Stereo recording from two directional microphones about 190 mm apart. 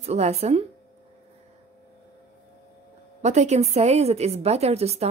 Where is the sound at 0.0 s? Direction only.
35° right (ahead or behind).